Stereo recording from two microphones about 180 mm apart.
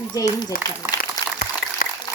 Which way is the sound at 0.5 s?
50° left (ahead or behind).